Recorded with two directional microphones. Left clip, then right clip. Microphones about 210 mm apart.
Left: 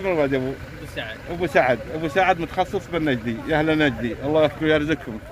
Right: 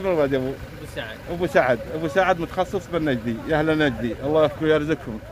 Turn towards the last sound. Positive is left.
turn(degrees=0)  # may be behind; listen again after turning